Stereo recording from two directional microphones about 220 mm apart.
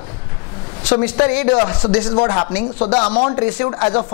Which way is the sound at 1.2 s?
15° left (ahead or behind).